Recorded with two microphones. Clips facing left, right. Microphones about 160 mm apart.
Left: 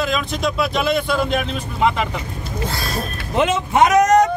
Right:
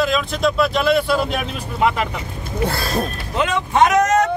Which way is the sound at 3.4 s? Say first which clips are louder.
Left 1 dB; 20° left (ahead or behind).